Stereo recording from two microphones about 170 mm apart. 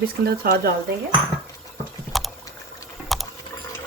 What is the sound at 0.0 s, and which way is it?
Speech, 65° right (ahead or behind).